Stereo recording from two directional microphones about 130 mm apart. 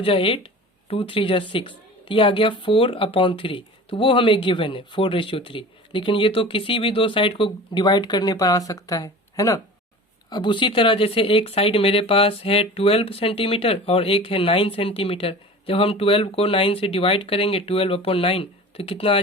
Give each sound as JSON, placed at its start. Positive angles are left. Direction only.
{"t": 0.0, "sound": "speech", "side_deg": 45}
{"t": 10.2, "sound": "speech", "side_deg": 35}